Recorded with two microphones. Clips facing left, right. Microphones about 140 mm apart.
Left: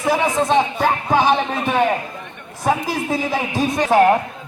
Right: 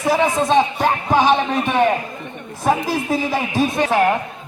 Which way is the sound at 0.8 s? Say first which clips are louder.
Even; 15° right (ahead or behind).